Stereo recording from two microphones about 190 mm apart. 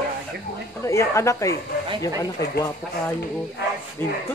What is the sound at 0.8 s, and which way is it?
Speech, 15° left (ahead or behind).